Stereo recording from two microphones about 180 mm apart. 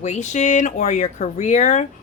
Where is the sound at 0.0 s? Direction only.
40° left (ahead or behind).